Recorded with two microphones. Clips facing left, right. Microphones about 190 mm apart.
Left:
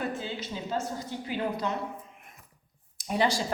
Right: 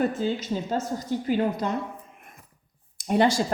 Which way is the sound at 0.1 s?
45° right (ahead or behind).